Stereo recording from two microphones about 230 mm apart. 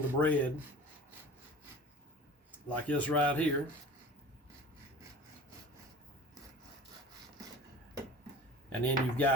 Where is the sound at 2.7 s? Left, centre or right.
Centre.